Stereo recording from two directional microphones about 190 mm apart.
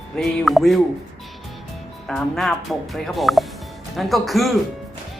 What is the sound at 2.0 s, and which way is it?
Speech, centre (ahead or behind).